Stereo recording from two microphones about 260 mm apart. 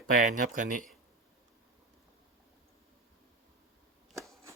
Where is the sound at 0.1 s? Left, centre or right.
Right.